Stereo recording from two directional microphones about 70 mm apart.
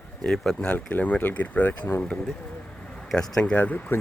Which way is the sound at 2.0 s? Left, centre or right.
Centre.